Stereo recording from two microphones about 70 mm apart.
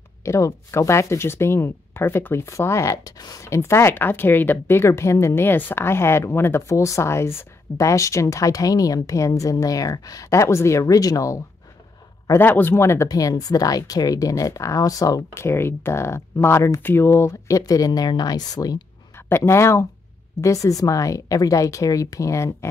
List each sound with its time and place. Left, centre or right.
0.2 s a woman's voice: left
3.4 s speech: left
6.7 s a woman's voice: left
12.4 s speech: left
13.1 s speech: left
15.3 s speech: left
17.6 s speech: left
19.1 s a woman's voice: left